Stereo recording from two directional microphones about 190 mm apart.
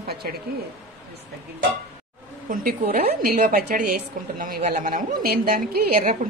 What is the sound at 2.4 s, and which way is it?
A woman's voice, 45° right (ahead or behind).